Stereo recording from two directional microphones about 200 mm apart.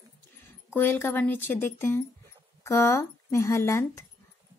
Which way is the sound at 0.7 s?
10° left (ahead or behind).